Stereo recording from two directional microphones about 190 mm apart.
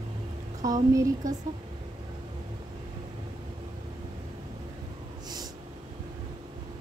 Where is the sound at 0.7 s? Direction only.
20° right (ahead or behind).